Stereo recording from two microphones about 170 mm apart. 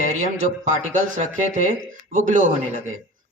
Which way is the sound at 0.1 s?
45° right (ahead or behind).